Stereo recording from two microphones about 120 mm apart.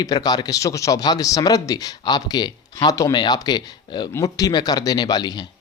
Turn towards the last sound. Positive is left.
turn(degrees=35)  # may be behind; listen again after turning